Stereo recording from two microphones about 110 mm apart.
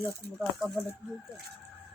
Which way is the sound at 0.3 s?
Centre (ahead or behind).